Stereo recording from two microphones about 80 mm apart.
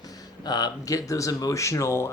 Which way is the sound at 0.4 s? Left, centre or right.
Left.